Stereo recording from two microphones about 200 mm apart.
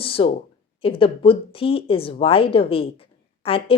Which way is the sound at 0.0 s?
25° left (ahead or behind).